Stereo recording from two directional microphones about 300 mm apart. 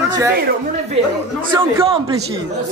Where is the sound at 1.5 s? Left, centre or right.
Centre.